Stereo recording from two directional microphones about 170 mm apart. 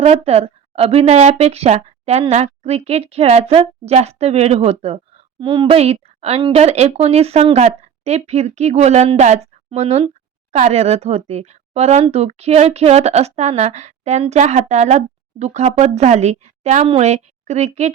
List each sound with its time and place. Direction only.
0.0 s a woman's voice: 35° right (ahead or behind)